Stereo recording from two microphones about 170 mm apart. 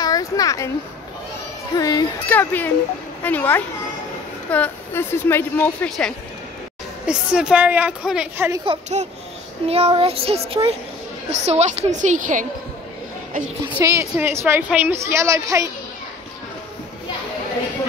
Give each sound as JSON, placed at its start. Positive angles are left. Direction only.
{"t": 0.0, "sound": "a sound", "side_deg": 20}
{"t": 1.8, "sound": "speech", "side_deg": 20}
{"t": 2.2, "sound": "speech", "side_deg": 10}
{"t": 7.1, "sound": "a woman's voice", "side_deg": -5}
{"t": 8.7, "sound": "a child's voice", "side_deg": -35}
{"t": 13.7, "sound": "a woman's voice", "side_deg": -15}